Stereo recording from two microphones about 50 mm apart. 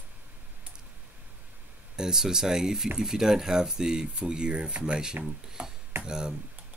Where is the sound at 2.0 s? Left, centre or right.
Centre.